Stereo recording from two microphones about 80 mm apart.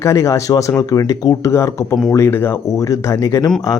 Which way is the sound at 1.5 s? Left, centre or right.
Left.